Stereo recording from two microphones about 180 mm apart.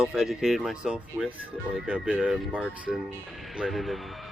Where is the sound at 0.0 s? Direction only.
5° right (ahead or behind).